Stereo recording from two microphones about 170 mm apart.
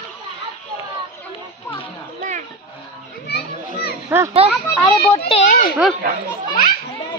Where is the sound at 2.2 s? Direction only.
45° right (ahead or behind).